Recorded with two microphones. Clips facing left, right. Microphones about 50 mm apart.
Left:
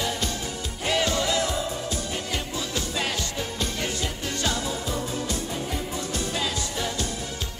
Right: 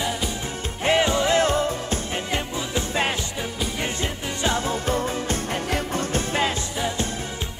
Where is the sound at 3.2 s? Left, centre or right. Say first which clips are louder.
Right 1 dB; centre.